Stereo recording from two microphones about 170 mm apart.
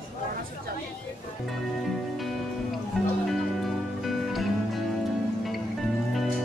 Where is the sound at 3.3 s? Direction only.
Centre (ahead or behind).